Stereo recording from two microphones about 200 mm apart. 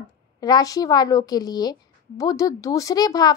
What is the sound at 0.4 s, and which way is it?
A woman's voice, 20° left (ahead or behind).